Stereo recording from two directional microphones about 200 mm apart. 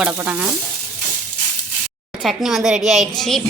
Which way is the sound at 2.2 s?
Centre (ahead or behind).